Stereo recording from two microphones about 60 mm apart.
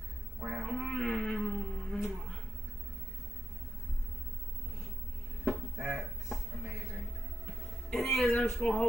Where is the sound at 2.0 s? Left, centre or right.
Centre.